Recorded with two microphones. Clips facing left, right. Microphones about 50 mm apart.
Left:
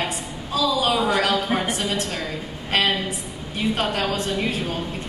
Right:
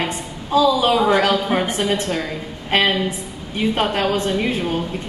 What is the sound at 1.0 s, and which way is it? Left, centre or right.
A woman's voice, right.